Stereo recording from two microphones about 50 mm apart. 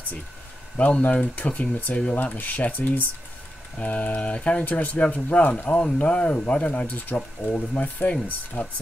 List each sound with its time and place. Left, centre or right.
0.7 s speech: left
2.3 s speech: left